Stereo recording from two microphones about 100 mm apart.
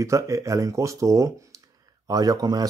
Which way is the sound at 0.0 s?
30° right (ahead or behind).